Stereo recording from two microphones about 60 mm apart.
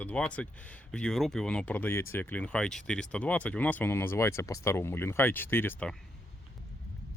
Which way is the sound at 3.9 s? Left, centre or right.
Left.